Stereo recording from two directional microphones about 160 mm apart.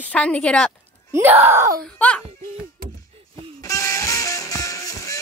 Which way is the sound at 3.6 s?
20° left (ahead or behind).